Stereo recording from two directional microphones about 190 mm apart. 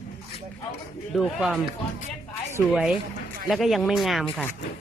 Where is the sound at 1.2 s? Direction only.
Centre (ahead or behind).